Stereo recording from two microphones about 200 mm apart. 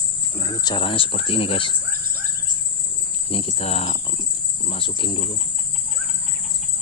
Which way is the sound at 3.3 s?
30° left (ahead or behind).